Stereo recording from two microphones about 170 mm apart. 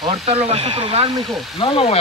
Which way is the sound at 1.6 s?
35° left (ahead or behind).